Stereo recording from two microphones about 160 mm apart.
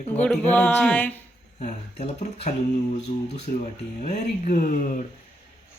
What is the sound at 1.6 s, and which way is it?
Speech, 45° left (ahead or behind).